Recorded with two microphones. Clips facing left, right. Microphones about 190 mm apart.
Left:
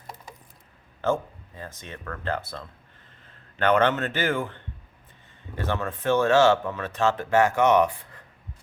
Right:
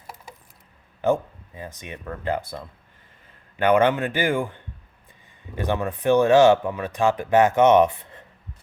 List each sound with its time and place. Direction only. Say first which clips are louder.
1.0 s speech: right 4 dB; 15° right (ahead or behind)